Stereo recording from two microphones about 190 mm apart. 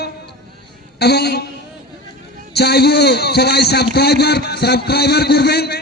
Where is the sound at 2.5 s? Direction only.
60° left (ahead or behind).